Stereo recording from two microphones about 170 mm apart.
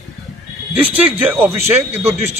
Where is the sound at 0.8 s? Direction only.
10° right (ahead or behind).